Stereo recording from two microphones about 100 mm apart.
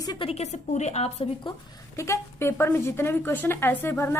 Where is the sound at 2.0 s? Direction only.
25° left (ahead or behind).